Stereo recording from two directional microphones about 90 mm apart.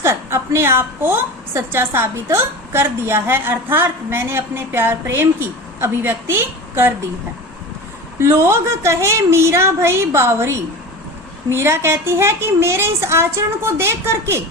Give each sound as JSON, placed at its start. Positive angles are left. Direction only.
{"t": 0.0, "sound": "a woman's voice", "side_deg": -30}
{"t": 8.2, "sound": "a woman's voice", "side_deg": -30}